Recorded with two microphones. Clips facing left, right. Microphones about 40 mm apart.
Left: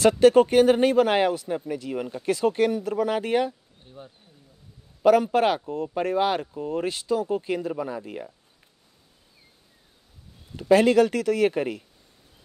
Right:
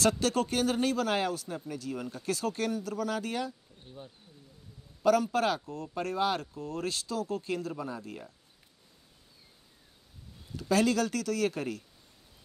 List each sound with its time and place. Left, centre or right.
0.0 s a man's voice: left
5.0 s speech: left
10.5 s a man's voice: left